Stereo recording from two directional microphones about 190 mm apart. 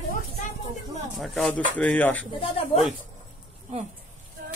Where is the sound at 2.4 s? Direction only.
30° left (ahead or behind).